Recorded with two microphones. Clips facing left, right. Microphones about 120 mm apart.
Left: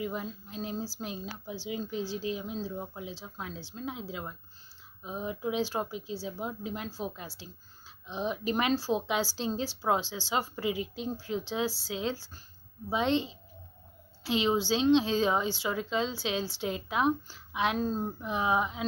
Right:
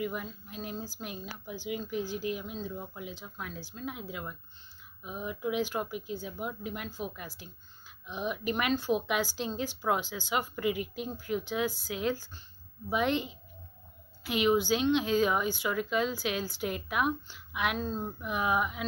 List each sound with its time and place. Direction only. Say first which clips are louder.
0.0 s speech: even; 30° left (ahead or behind)